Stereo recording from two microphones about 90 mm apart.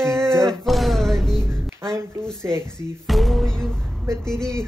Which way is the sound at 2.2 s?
5° left (ahead or behind).